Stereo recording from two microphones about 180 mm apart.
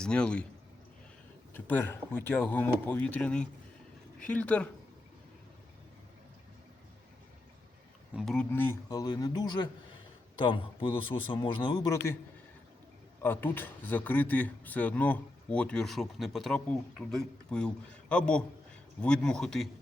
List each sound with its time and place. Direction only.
0.0 s a man's voice: 5° left (ahead or behind)
1.5 s speech: 10° left (ahead or behind)
8.1 s a man's voice: centre (ahead or behind); by 12.1 s 20° left (ahead or behind)
13.2 s a man's voice: 10° left (ahead or behind)